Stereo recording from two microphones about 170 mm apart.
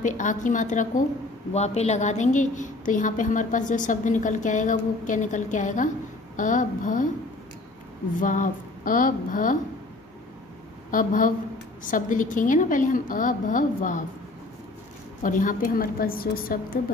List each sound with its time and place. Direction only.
0.0 s a woman's voice: 50° left (ahead or behind)
8.2 s a woman's voice: 50° left (ahead or behind)
10.9 s a woman's voice: 50° left (ahead or behind)
15.2 s a woman's voice: 50° left (ahead or behind)